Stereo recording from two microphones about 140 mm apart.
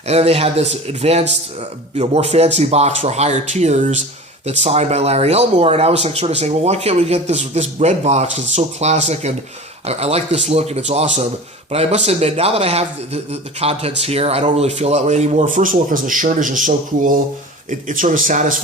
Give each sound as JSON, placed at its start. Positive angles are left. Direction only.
{"t": 0.1, "sound": "speech", "side_deg": -50}